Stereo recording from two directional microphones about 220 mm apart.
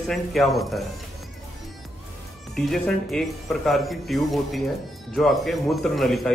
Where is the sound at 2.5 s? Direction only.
Centre (ahead or behind).